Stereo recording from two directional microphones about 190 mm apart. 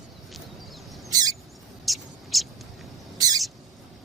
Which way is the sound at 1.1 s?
20° right (ahead or behind).